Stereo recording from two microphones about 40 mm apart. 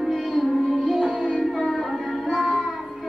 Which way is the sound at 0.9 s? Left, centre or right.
Centre.